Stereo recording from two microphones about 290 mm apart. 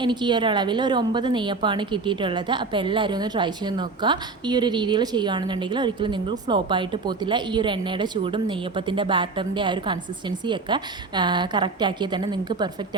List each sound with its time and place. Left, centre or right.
0.0 s a woman's voice: centre